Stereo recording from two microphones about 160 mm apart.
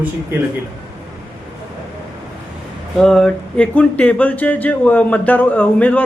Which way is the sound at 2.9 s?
Centre (ahead or behind).